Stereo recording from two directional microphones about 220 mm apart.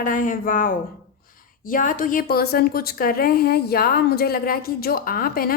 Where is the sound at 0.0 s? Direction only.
35° left (ahead or behind).